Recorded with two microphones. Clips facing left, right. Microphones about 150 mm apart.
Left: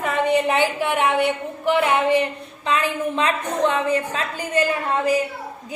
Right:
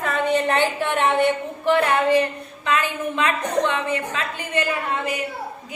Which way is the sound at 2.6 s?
30° left (ahead or behind).